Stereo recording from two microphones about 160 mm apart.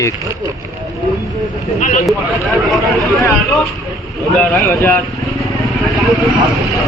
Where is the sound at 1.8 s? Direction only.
55° left (ahead or behind).